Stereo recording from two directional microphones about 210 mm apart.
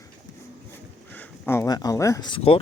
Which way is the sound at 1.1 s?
10° left (ahead or behind).